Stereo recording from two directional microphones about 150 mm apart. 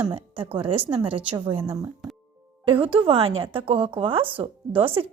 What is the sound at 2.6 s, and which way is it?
A woman's voice, 35° right (ahead or behind).